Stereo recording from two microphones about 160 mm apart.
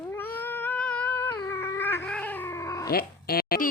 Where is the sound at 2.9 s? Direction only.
70° left (ahead or behind).